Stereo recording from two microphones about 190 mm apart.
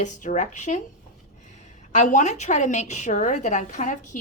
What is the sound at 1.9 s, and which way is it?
A woman's voice, 40° left (ahead or behind).